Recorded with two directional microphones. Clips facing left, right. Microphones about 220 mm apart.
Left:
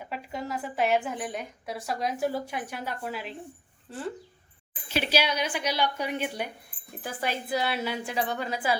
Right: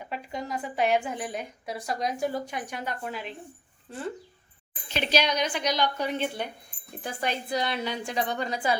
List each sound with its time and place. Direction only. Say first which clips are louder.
0.0 s a woman's voice: even; 5° left (ahead or behind)
4.9 s a woman's voice: right 1 dB; 5° left (ahead or behind)